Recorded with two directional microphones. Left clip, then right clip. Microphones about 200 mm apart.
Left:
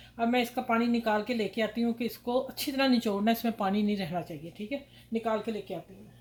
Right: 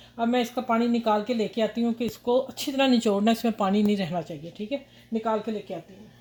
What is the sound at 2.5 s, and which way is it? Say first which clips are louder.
Speech: right 4 dB; 35° right (ahead or behind).